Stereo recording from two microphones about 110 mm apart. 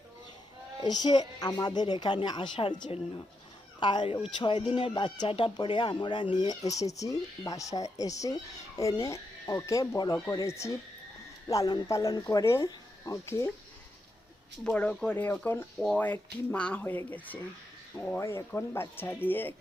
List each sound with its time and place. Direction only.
0.8 s a woman's voice: 40° left (ahead or behind)
14.6 s speech: 10° left (ahead or behind)
18.2 s speech: 25° left (ahead or behind)